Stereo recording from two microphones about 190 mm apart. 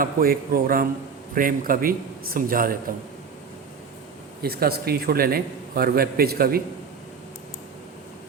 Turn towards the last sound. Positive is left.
turn(degrees=-50)  # may be behind; listen again after turning